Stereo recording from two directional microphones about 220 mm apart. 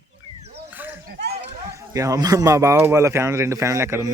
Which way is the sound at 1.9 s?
15° right (ahead or behind).